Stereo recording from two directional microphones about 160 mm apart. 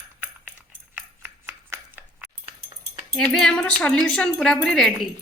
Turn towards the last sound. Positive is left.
turn(degrees=0)  # may be behind; listen again after turning